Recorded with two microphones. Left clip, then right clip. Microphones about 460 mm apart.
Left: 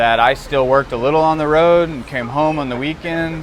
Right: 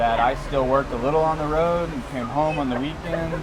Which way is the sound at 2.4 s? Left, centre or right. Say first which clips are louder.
Left 5 dB; left.